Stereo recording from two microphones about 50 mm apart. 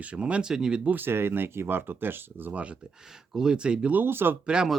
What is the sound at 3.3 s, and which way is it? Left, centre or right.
Speech, centre.